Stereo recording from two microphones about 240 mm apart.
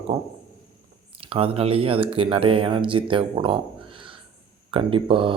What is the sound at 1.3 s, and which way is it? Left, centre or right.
Speech, right.